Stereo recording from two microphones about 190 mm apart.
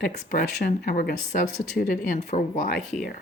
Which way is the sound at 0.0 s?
45° left (ahead or behind).